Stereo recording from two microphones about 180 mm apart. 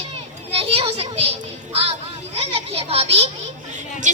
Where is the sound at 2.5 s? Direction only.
35° right (ahead or behind).